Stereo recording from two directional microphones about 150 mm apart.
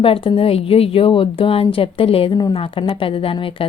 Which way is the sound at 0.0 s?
40° left (ahead or behind).